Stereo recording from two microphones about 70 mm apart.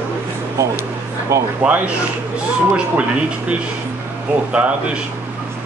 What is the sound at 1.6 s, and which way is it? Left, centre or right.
Speech, centre.